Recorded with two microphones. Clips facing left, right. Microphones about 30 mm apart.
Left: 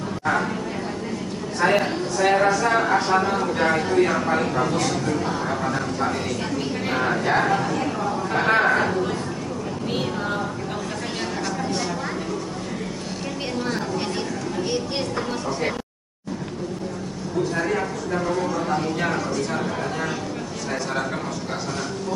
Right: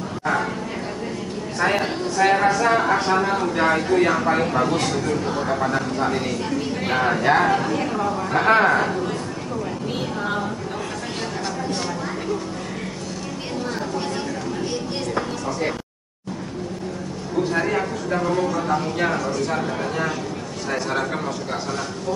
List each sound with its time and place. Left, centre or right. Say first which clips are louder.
1.6 s a woman's voice: left 1 dB; centre
5.6 s a woman's voice: right 2 dB; centre
8.5 s a woman's voice: right 3 dB; centre
8.7 s speech: even; centre
17.5 s a sound: right 3 dB; centre
18.4 s a man's voice: right 2 dB; centre